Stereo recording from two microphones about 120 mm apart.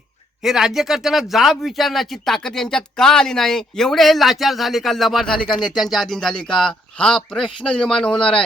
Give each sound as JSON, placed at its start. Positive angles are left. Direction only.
{"t": 0.4, "sound": "speech", "side_deg": -5}
{"t": 5.5, "sound": "speech", "side_deg": 40}
{"t": 5.8, "sound": "speech", "side_deg": 0}